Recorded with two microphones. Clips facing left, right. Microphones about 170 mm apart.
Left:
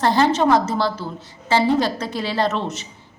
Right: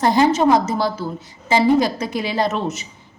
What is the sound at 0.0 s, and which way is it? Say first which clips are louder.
A woman's voice: right 2 dB; 15° right (ahead or behind).